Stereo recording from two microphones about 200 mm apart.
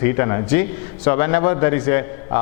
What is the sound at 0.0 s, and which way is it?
A man's voice, 20° left (ahead or behind).